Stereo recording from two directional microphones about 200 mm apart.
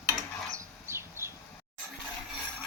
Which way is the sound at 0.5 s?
15° right (ahead or behind).